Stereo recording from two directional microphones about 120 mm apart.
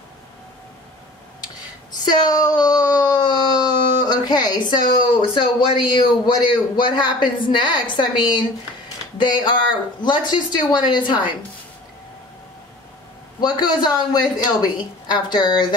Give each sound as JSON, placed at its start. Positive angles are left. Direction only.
{"t": 2.0, "sound": "a sound", "side_deg": 35}
{"t": 5.2, "sound": "a woman's voice", "side_deg": 40}
{"t": 13.4, "sound": "a woman's voice", "side_deg": 35}